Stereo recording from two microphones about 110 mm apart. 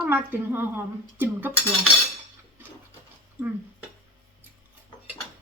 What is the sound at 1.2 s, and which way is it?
Dishes, 15° right (ahead or behind).